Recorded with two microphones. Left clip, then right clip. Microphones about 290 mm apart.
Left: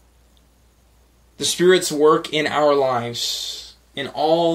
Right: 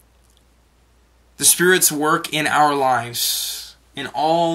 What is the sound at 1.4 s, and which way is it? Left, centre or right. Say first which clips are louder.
Speech: even; right.